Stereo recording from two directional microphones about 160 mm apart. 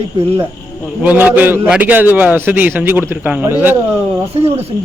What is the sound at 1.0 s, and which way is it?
A man's voice, 10° right (ahead or behind).